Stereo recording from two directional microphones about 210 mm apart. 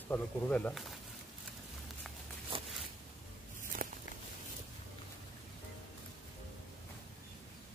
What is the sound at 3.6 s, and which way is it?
Walk, 40° right (ahead or behind).